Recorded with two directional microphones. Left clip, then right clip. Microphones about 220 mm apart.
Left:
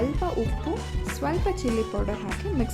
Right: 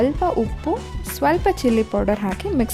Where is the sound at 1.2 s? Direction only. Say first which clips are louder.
Right 10 dB; 45° right (ahead or behind).